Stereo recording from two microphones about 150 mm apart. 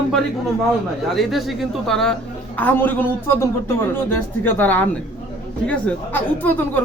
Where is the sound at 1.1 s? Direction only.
Centre (ahead or behind).